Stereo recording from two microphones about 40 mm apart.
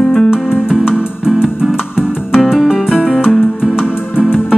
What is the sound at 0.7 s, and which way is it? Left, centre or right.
Music, right.